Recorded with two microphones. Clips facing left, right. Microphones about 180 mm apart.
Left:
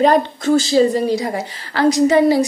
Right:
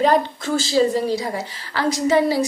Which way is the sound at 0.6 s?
20° left (ahead or behind).